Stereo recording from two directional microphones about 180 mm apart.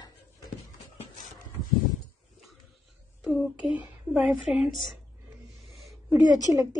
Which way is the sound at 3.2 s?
Centre (ahead or behind).